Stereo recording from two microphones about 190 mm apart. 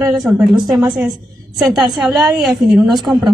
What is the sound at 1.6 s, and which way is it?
A woman's voice, centre (ahead or behind).